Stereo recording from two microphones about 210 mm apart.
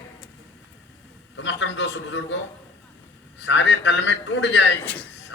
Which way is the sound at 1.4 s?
60° left (ahead or behind).